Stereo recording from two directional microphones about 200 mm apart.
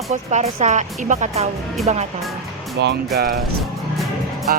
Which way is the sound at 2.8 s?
60° right (ahead or behind).